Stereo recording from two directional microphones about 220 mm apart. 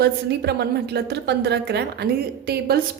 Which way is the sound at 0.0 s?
50° right (ahead or behind).